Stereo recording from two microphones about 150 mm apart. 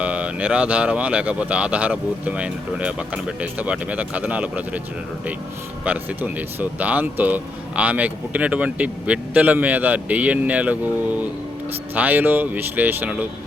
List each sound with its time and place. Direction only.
0.0 s speech: 10° right (ahead or behind)
5.8 s speech: 10° right (ahead or behind)
11.9 s speech: 10° right (ahead or behind)